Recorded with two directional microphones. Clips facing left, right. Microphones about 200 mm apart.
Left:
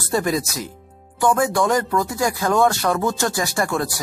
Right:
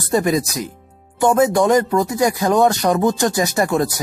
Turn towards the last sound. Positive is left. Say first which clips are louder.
# right 5 dB
turn(degrees=-20)  # may be behind; listen again after turning